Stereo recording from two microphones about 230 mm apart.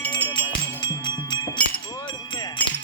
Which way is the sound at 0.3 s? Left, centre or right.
Centre.